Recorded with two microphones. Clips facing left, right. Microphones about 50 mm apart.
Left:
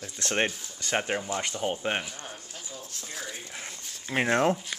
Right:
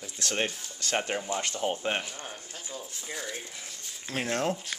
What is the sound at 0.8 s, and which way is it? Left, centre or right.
Speech, centre.